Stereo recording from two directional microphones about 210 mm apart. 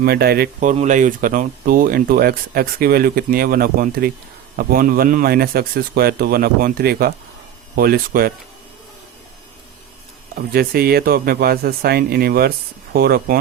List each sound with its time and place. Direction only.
0.0 s speech: 50° right (ahead or behind)
10.3 s speech: 45° right (ahead or behind)